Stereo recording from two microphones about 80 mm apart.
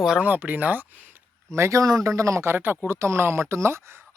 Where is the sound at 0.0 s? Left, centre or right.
Centre.